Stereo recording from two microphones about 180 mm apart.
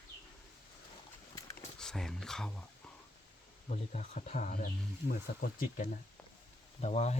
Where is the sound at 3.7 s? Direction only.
40° left (ahead or behind).